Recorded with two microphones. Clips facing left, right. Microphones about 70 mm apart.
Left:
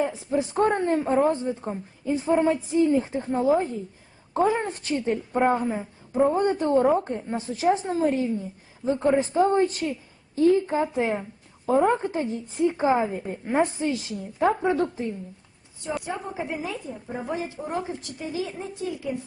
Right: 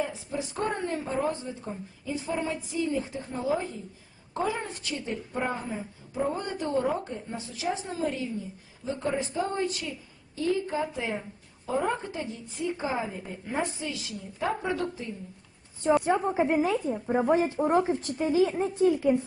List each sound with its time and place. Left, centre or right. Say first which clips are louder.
0.0 s speech: left 7 dB; left
5.5 s speech: left 8 dB; left
6.3 s speech: left 8 dB; left
16.0 s a woman's voice: right 6 dB; right
17.2 s a woman's voice: right 7 dB; right